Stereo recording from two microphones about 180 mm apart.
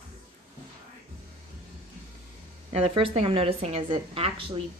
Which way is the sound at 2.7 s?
35° right (ahead or behind).